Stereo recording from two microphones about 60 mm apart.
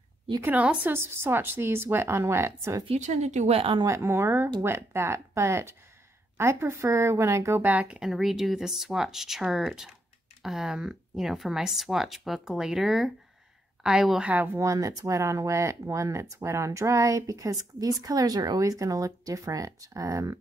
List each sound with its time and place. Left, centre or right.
0.8 s speech: right
3.8 s speech: right
7.6 s speech: right
8.0 s speech: centre
14.2 s speech: right
14.6 s speech: right
16.3 s a woman's voice: right